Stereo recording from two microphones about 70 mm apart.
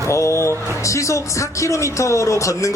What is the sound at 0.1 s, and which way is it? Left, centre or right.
A man's voice, left.